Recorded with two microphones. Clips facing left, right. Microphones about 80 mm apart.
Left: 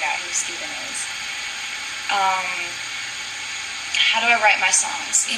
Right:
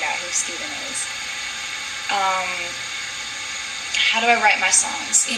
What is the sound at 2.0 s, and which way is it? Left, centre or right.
Speech, centre.